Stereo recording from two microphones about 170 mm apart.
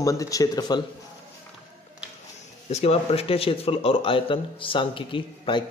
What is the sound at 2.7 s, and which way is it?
Speech, 35° left (ahead or behind).